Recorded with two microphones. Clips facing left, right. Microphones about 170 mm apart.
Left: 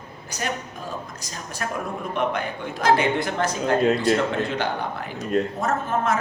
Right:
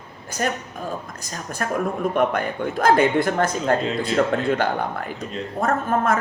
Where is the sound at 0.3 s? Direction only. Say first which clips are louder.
Right 5 dB; 50° right (ahead or behind).